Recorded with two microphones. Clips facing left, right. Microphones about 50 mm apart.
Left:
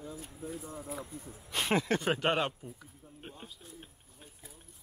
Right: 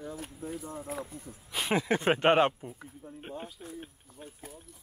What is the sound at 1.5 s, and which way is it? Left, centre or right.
Speech, centre.